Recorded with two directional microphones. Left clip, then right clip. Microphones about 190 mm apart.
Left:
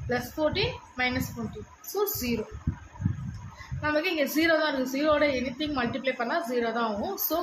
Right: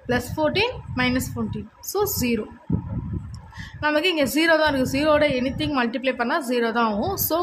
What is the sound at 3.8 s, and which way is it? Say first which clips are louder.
A woman's voice: right 6 dB; 60° right (ahead or behind).